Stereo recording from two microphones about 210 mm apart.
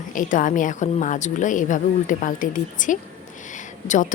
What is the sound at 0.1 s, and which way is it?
A woman's voice, 40° left (ahead or behind).